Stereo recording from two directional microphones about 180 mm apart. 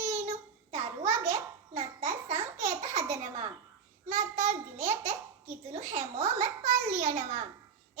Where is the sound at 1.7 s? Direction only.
40° right (ahead or behind).